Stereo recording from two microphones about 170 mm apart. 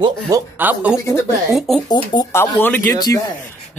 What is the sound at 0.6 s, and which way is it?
Speech, 10° right (ahead or behind).